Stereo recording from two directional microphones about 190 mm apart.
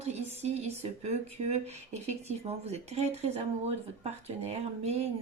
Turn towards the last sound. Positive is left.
turn(degrees=-35)  # may be behind; listen again after turning